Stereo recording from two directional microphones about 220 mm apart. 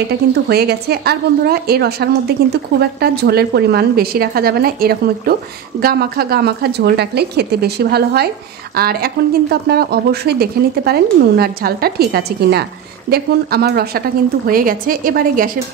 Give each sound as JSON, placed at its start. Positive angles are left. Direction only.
{"t": 0.3, "sound": "a woman's voice", "side_deg": -45}